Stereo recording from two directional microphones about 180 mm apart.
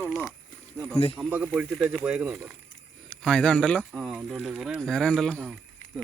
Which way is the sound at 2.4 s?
5° left (ahead or behind).